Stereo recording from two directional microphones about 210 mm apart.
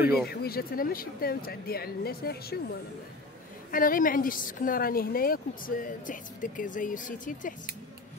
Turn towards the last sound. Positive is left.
turn(degrees=40)  # may be behind; listen again after turning